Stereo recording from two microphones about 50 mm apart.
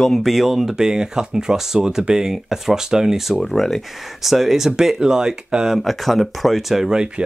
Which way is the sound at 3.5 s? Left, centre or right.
Centre.